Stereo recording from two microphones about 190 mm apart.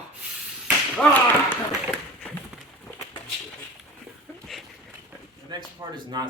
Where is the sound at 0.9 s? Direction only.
10° left (ahead or behind).